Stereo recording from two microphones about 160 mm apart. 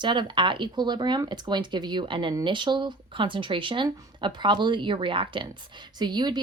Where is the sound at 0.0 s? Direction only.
30° right (ahead or behind).